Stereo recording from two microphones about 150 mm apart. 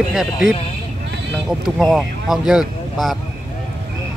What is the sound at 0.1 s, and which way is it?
Speech, 5° right (ahead or behind).